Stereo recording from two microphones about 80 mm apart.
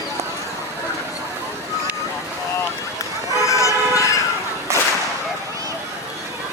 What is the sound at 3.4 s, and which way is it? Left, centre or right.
Vehicle, left.